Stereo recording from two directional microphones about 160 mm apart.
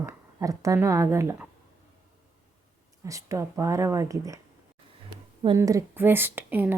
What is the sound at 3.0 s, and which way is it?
Speech, 20° right (ahead or behind).